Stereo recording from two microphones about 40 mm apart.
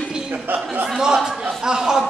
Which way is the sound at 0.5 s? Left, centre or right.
Right.